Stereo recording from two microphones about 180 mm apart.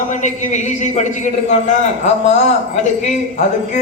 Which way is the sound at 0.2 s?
40° left (ahead or behind).